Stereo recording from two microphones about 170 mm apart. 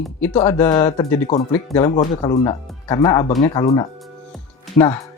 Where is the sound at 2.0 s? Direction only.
25° left (ahead or behind).